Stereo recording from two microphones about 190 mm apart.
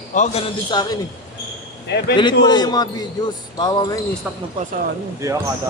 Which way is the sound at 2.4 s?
20° left (ahead or behind).